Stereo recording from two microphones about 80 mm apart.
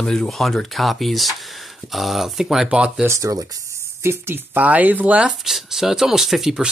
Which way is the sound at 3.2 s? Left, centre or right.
Right.